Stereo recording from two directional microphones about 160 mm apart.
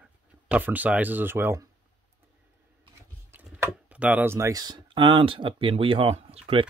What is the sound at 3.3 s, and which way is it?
Speech, 10° right (ahead or behind).